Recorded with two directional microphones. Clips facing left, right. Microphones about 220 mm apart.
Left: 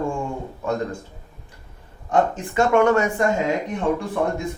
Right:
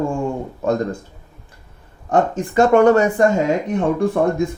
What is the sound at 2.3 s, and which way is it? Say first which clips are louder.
Speech: right 5 dB; 35° right (ahead or behind).